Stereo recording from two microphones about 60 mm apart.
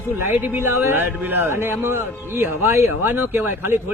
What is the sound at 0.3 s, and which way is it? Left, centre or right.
A man's voice, right.